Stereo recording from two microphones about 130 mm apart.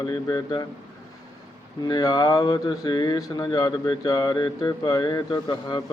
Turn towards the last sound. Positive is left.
turn(degrees=35)  # may be behind; listen again after turning